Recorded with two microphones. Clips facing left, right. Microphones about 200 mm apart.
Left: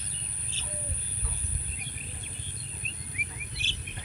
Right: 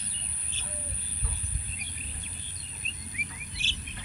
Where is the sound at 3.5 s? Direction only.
60° left (ahead or behind).